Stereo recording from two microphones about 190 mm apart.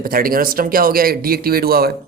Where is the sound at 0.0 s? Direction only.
50° right (ahead or behind).